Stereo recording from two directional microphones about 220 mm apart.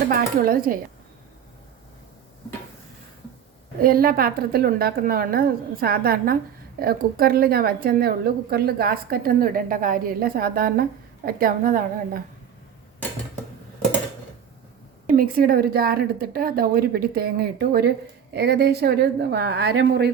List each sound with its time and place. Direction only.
0.1 s a woman's voice: 40° right (ahead or behind)
3.8 s a woman's voice: 40° right (ahead or behind)
15.1 s a woman's voice: 40° right (ahead or behind)
19.7 s speech: 60° right (ahead or behind)